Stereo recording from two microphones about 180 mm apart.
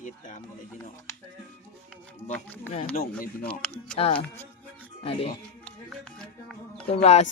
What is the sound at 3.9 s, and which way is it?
Speech, 30° left (ahead or behind).